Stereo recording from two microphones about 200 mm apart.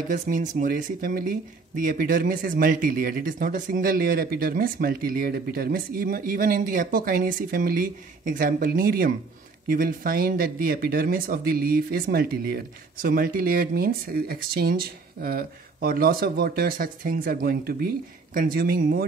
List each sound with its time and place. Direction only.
0.1 s speech: 40° right (ahead or behind)